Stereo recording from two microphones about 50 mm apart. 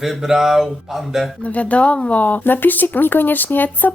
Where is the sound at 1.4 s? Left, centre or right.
Left.